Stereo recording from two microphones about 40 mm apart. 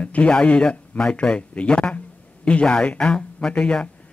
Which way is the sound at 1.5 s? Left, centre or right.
Left.